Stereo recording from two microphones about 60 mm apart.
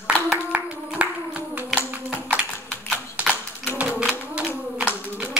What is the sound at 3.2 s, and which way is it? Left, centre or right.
Clapping, right.